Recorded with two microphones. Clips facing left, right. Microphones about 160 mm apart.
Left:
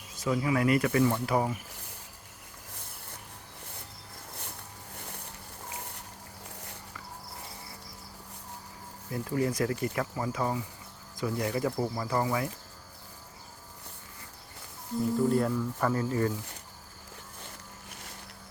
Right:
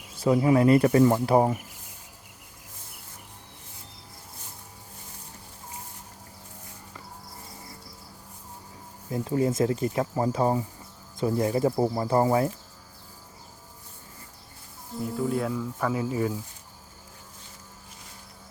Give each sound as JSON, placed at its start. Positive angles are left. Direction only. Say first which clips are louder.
{"t": 0.2, "sound": "speech", "louder": "right 7 dB", "side_deg": -30}
{"t": 4.9, "sound": "boat", "louder": "left 7 dB", "side_deg": 65}
{"t": 9.0, "sound": "speech", "louder": "right 4 dB", "side_deg": -25}
{"t": 10.2, "sound": "speech", "louder": "right 7 dB", "side_deg": -35}
{"t": 15.1, "sound": "speech", "louder": "left 1 dB", "side_deg": -5}